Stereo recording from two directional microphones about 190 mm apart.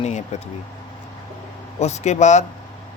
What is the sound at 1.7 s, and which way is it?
Speech, 35° left (ahead or behind).